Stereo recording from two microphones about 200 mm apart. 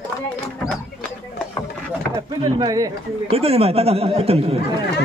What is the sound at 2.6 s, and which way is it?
Speech, 20° right (ahead or behind).